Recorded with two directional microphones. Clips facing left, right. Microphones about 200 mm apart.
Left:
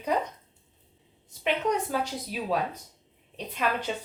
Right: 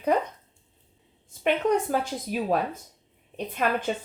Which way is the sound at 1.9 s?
50° right (ahead or behind).